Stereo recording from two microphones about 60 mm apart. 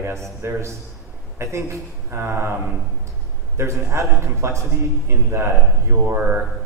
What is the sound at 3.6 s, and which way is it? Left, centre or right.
A man's voice, right.